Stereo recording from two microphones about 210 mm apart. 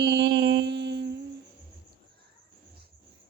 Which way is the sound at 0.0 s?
55° right (ahead or behind).